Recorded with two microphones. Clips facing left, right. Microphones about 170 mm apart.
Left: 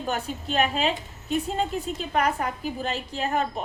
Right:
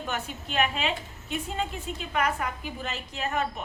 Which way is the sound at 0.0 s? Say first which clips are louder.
Left 4 dB; 35° left (ahead or behind).